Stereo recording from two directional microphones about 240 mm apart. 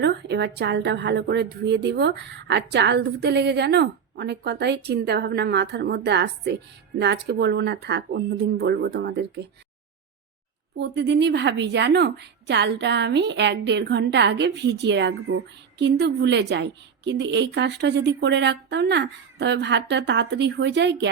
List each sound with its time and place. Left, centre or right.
0.0 s a woman's voice: right
10.8 s a woman's voice: right